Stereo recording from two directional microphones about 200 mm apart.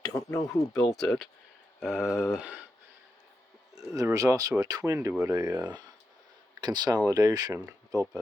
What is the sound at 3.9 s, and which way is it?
Speech, 15° right (ahead or behind).